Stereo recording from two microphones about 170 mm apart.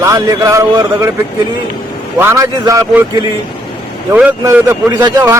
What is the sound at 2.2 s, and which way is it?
Speech, 15° right (ahead or behind).